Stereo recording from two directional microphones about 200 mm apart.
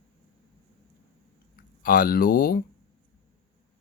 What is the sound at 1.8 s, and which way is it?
Speech, 45° left (ahead or behind).